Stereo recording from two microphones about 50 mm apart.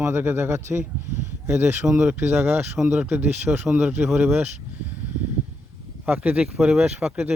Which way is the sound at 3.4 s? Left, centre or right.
Right.